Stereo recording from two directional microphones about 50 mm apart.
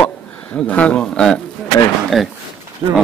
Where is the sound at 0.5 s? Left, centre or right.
Left.